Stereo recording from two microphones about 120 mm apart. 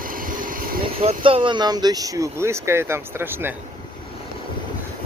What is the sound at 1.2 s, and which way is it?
Speech, 45° right (ahead or behind).